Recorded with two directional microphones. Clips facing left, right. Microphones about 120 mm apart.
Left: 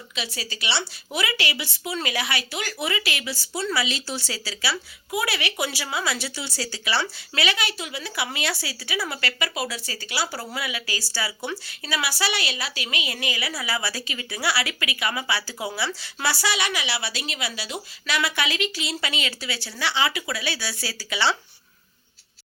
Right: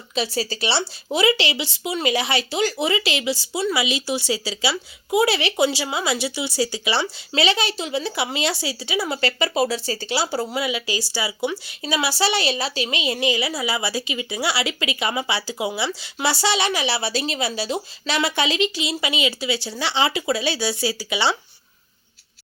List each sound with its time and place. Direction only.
0.2 s speech: 35° right (ahead or behind); by 21.3 s 15° right (ahead or behind)